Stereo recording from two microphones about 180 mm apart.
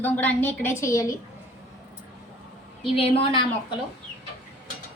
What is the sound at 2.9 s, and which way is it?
Speech, 30° left (ahead or behind).